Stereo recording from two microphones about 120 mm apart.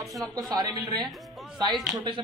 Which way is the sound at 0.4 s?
35° right (ahead or behind).